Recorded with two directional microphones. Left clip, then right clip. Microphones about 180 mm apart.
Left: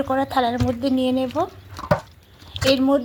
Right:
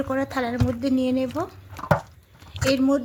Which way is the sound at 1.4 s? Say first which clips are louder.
Left 6 dB; 20° right (ahead or behind).